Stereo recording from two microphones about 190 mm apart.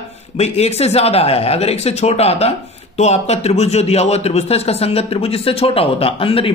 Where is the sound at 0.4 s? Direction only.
35° left (ahead or behind).